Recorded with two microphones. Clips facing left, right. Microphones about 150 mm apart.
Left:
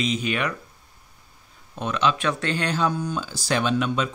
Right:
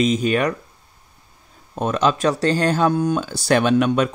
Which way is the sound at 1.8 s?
45° right (ahead or behind).